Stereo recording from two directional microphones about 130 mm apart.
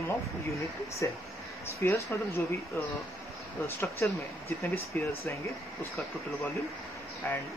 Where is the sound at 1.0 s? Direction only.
20° left (ahead or behind).